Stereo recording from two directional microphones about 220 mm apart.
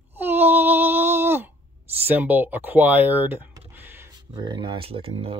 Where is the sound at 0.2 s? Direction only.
10° right (ahead or behind).